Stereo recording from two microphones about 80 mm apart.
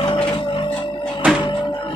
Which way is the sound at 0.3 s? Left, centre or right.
Left.